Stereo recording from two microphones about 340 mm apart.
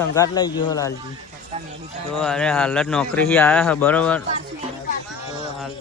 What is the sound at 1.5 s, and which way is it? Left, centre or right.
Clip-clop, centre.